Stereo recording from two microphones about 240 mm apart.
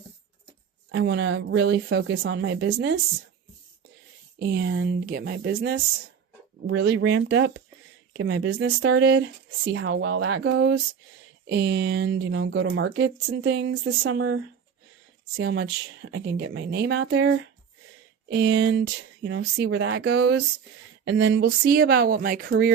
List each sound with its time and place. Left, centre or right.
0.9 s speech: right
4.4 s speech: right
6.7 s speech: right
15.4 s speech: right